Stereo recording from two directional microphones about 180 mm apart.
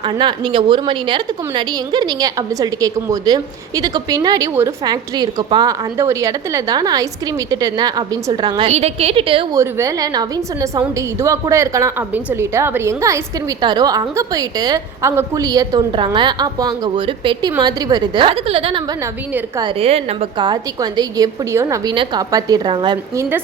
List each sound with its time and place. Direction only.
0.0 s a woman's voice: 25° right (ahead or behind)
8.6 s a woman's voice: 35° right (ahead or behind)
9.6 s a woman's voice: 20° right (ahead or behind)